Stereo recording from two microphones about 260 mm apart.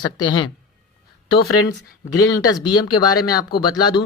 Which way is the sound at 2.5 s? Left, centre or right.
Centre.